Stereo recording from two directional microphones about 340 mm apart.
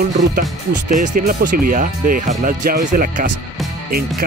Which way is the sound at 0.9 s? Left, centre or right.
Right.